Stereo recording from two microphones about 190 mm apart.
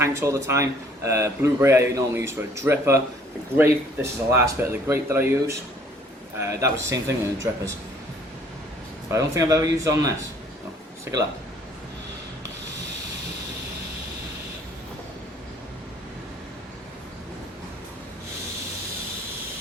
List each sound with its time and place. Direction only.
0.0 s a man's voice: 15° right (ahead or behind)
9.0 s a man's voice: 15° right (ahead or behind)